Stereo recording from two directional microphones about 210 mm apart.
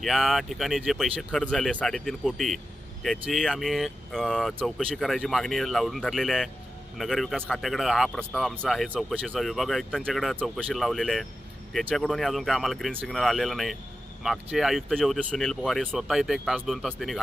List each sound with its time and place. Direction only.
0.0 s speech: centre (ahead or behind)